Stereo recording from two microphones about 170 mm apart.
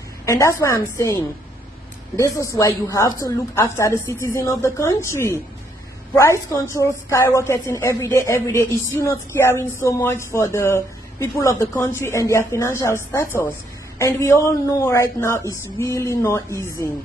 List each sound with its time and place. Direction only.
0.2 s a woman's voice: 20° left (ahead or behind)